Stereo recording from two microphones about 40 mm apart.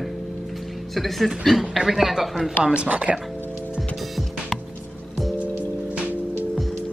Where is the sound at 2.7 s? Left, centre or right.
Right.